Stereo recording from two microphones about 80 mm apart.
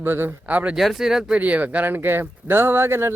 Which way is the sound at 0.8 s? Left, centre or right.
Centre.